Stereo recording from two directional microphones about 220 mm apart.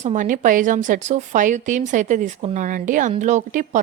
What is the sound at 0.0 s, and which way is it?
A woman's voice, 35° right (ahead or behind).